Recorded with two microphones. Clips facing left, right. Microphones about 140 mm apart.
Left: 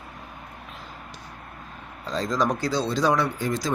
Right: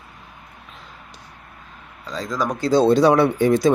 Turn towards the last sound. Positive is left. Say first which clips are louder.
# right 10 dB
turn(degrees=-60)  # may be behind; listen again after turning